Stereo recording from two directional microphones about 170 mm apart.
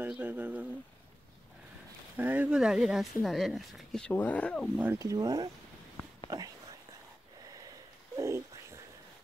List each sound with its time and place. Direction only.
0.0 s speech: 10° right (ahead or behind)
2.1 s speech: 10° right (ahead or behind); by 4.6 s 5° left (ahead or behind)
4.7 s speech: 15° right (ahead or behind)
7.4 s a sound: 20° right (ahead or behind)